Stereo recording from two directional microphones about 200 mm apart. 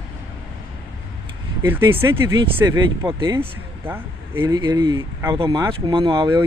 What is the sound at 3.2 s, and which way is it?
Speech, 10° right (ahead or behind).